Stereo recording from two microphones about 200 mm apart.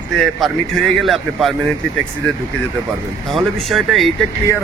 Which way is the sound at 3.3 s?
Centre (ahead or behind).